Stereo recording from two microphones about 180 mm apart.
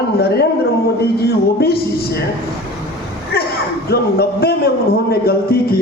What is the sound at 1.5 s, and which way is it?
Speech, 60° left (ahead or behind).